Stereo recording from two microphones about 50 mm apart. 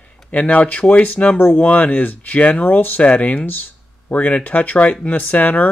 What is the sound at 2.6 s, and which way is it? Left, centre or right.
Speech, left.